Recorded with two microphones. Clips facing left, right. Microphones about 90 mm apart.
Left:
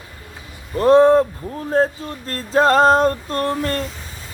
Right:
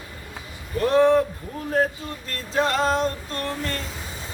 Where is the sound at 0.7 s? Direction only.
35° left (ahead or behind).